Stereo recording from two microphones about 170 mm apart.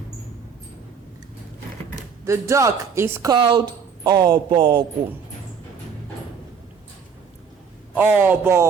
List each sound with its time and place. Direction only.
2.2 s speech: 15° right (ahead or behind)
3.3 s speech: 25° right (ahead or behind)
7.9 s speech: 10° right (ahead or behind)